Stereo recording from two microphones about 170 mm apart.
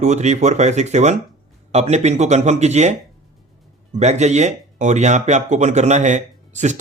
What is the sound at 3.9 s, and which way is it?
Speech, 40° right (ahead or behind).